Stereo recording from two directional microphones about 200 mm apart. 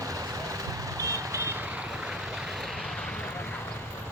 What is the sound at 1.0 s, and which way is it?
Vehicle, 15° right (ahead or behind).